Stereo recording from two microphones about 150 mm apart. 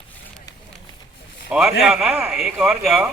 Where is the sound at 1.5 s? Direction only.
5° right (ahead or behind).